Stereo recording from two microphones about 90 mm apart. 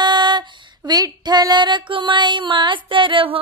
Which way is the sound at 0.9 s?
45° right (ahead or behind).